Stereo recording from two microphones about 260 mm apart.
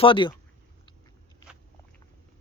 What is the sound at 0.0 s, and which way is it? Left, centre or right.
Speech, centre.